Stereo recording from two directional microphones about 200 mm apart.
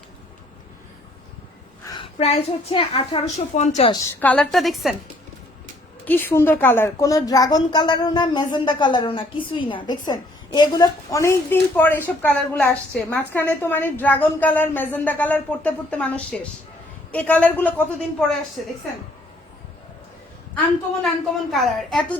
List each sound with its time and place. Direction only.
1.8 s a sound: 20° left (ahead or behind)
2.1 s a woman's voice: 30° left (ahead or behind)
3.9 s a woman's voice: 10° left (ahead or behind)
6.1 s a woman's voice: 10° left (ahead or behind)
21.5 s a woman's voice: centre (ahead or behind)